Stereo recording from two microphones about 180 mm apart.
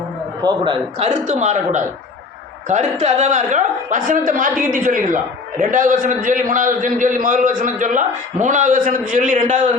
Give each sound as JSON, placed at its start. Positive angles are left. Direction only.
{"t": 0.4, "sound": "speech", "side_deg": -25}